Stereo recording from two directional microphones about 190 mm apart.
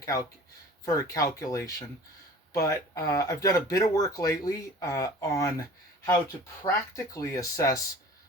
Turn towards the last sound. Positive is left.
turn(degrees=15)  # may be behind; listen again after turning